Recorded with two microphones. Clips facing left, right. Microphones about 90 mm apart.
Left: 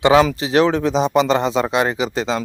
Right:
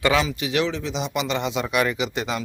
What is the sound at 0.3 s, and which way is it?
Speech, 35° left (ahead or behind).